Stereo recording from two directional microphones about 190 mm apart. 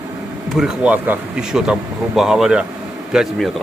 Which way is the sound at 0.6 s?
5° right (ahead or behind).